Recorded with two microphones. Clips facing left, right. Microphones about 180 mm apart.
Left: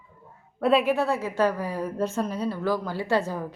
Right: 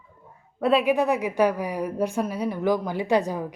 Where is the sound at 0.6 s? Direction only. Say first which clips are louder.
Even; centre (ahead or behind).